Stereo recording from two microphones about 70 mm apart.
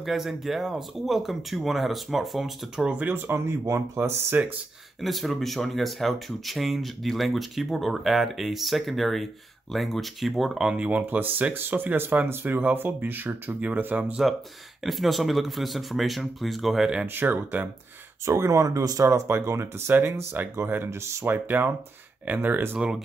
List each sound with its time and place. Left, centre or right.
0.0 s speech: centre
3.1 s speech: right
5.0 s speech: centre
10.7 s speech: centre
14.9 s speech: centre
17.0 s speech: right
18.2 s speech: right
19.0 s speech: right
21.3 s speech: right